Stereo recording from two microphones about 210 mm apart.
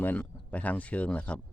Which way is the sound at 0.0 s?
5° left (ahead or behind).